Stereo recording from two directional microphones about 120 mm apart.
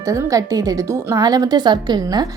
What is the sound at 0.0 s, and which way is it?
A woman's voice, 25° right (ahead or behind).